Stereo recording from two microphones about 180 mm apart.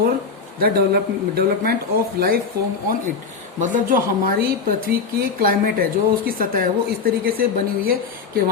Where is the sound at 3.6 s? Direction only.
50° right (ahead or behind).